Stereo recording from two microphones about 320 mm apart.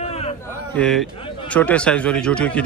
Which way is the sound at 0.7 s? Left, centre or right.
Centre.